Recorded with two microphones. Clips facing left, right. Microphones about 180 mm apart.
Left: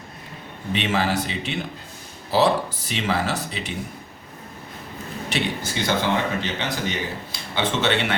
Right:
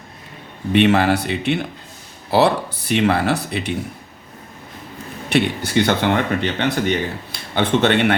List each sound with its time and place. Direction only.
0.7 s speech: 60° right (ahead or behind)
5.3 s speech: 65° right (ahead or behind)